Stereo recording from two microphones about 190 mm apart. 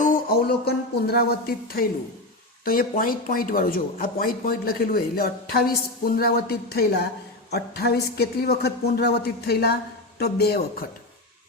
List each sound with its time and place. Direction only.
0.0 s speech: 55° left (ahead or behind)